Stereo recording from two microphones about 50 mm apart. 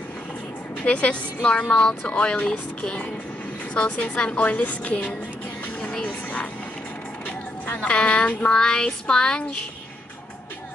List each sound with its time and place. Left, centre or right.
0.8 s a woman's voice: left
2.8 s a sound: centre
3.7 s a woman's voice: left
5.8 s music: left
7.2 s speech: left
8.5 s a sound: centre